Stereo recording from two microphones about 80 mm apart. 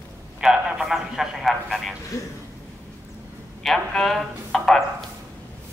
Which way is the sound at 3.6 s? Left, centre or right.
Centre.